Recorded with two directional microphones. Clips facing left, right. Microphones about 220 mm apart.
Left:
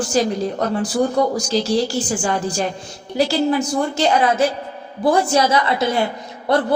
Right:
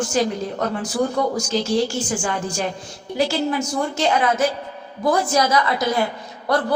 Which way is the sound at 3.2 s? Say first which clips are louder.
Left 2 dB; 35° left (ahead or behind).